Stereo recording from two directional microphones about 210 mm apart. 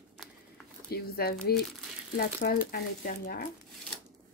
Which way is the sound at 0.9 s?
50° left (ahead or behind).